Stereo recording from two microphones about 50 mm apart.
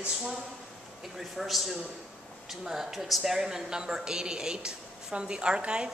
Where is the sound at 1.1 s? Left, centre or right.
Centre.